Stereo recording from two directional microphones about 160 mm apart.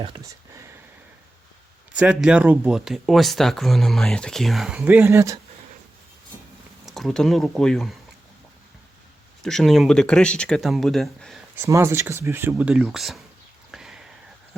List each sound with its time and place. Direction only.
0.0 s a sound: 25° right (ahead or behind)
2.0 s speech: 5° right (ahead or behind)
6.8 s speech: centre (ahead or behind)
9.4 s speech: 5° left (ahead or behind)
11.5 s speech: 15° right (ahead or behind); by 13.2 s centre (ahead or behind)
13.7 s a sound: 5° right (ahead or behind)